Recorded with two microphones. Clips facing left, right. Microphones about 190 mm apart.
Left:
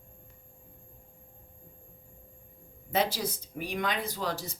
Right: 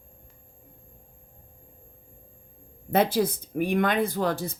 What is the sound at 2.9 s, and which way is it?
Speech, 55° right (ahead or behind).